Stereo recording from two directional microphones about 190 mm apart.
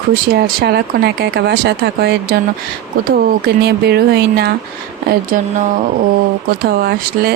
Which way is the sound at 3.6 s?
60° right (ahead or behind).